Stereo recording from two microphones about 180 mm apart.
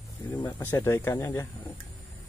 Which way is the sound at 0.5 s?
15° left (ahead or behind).